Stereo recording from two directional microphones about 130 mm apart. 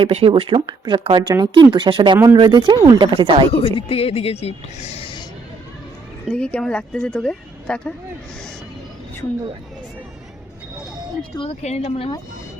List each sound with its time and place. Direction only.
0.0 s speech: 50° right (ahead or behind)
2.1 s speech: 25° right (ahead or behind)
2.4 s speech: 35° right (ahead or behind)
3.5 s speech: 45° left (ahead or behind)
6.2 s speech: 10° left (ahead or behind)
11.6 s speech: 55° left (ahead or behind)